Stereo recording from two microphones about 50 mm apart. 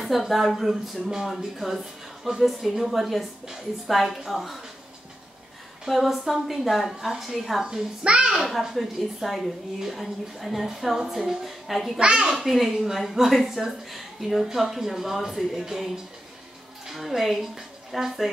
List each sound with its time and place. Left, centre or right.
0.0 s a woman's voice: centre
5.9 s a woman's voice: centre
8.0 s a child's voice: right
8.4 s a woman's voice: centre
12.0 s a child's voice: centre